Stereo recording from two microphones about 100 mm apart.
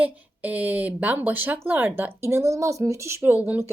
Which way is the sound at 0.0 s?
15° right (ahead or behind).